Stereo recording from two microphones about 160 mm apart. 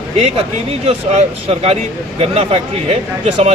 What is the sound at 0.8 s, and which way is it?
Speech, 40° right (ahead or behind).